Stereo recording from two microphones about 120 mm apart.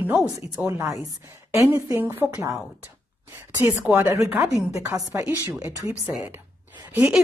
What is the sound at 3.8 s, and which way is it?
Speech, 20° right (ahead or behind).